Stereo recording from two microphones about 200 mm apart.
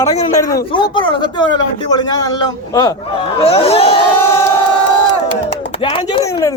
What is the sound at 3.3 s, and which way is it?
Speech, 30° left (ahead or behind).